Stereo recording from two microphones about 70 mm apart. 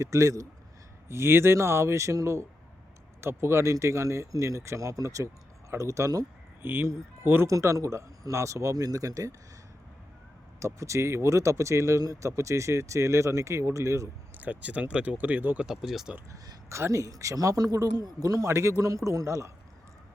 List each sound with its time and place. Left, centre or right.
0.0 s speech: right
1.0 s a man's voice: right
6.6 s speech: right
7.4 s speech: right
10.6 s speech: right
14.3 s speech: right
15.6 s speech: centre
16.6 s speech: right